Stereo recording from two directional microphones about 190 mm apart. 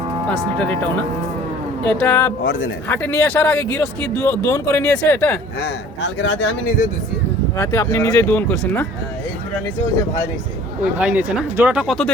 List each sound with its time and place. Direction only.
0.3 s speech: 5° left (ahead or behind)
2.5 s a man's voice: 90° left
2.9 s speech: 10° left (ahead or behind)
5.5 s speech: 65° left (ahead or behind)
7.5 s speech: 15° left (ahead or behind)
10.9 s speech: 5° right (ahead or behind)